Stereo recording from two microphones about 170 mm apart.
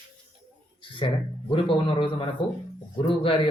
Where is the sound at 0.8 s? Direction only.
30° left (ahead or behind).